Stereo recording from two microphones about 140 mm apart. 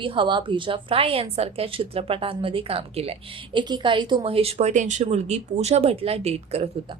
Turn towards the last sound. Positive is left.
turn(degrees=-45)  # may be behind; listen again after turning